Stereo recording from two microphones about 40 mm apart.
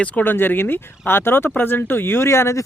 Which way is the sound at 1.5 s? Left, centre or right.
Left.